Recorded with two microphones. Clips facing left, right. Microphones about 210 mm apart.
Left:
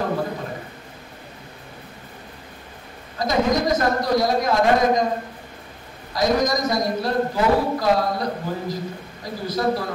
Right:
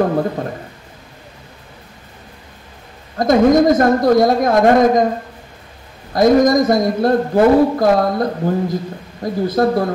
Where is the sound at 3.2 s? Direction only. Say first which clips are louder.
Right 9 dB; 50° right (ahead or behind).